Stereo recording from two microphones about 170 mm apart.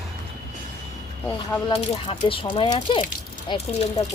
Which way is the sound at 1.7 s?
35° left (ahead or behind).